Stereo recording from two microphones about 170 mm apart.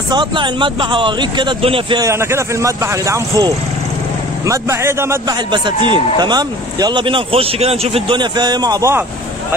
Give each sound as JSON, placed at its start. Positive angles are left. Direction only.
{"t": 0.1, "sound": "a man's voice", "side_deg": -30}
{"t": 2.0, "sound": "speech", "side_deg": -15}
{"t": 5.5, "sound": "a man's voice", "side_deg": -30}